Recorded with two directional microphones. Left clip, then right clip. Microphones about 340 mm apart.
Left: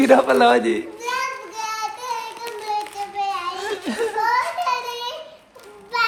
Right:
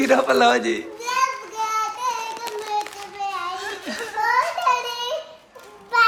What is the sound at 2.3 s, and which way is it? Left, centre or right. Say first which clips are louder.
Child singing: even; right.